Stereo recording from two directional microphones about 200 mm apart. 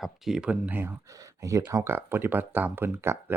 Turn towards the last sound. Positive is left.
turn(degrees=-10)  # may be behind; listen again after turning